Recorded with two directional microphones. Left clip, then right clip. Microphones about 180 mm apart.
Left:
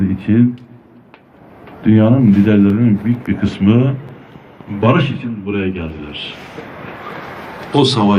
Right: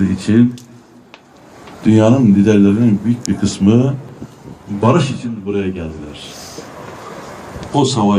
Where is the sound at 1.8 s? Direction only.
90° right.